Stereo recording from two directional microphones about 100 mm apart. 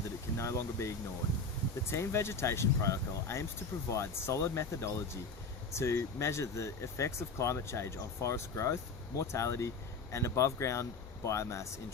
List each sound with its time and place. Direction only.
0.3 s speech: 30° left (ahead or behind)